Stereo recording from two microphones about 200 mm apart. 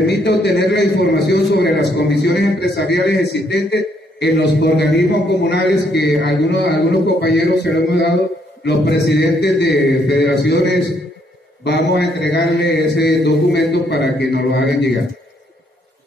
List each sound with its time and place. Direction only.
0.0 s a man's voice: 55° left (ahead or behind)